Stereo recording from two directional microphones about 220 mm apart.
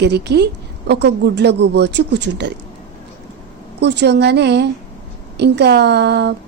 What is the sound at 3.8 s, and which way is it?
A woman's voice, 50° right (ahead or behind).